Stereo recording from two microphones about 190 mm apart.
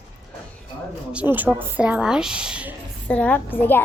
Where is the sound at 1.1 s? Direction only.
10° right (ahead or behind).